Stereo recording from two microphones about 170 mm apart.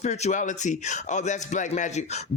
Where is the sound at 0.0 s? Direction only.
40° left (ahead or behind).